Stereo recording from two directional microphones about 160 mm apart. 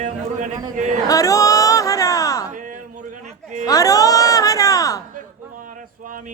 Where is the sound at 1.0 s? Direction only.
20° left (ahead or behind).